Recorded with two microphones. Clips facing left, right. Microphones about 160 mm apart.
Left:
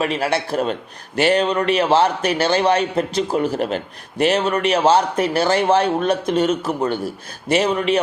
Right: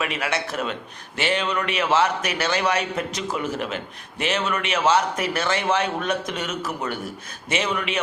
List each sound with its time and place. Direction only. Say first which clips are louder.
0.0 s a man's voice: left 6 dB; 35° left (ahead or behind)